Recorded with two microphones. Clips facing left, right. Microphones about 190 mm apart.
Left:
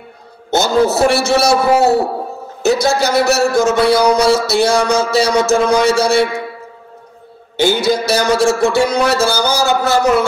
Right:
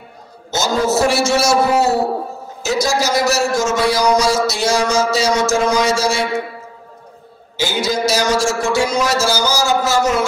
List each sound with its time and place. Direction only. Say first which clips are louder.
0.5 s a man's voice: left 4 dB; 60° left (ahead or behind)
7.5 s a man's voice: left 6 dB; 60° left (ahead or behind)